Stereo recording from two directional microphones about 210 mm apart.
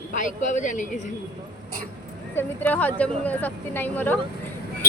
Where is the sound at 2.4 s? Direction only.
10° left (ahead or behind).